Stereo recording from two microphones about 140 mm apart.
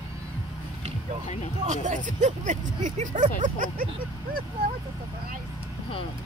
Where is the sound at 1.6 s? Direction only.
60° right (ahead or behind).